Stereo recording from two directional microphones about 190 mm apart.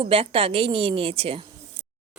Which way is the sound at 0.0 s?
30° right (ahead or behind).